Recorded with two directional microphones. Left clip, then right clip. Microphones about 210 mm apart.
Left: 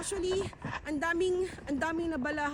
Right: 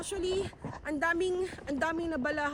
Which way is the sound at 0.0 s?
25° right (ahead or behind).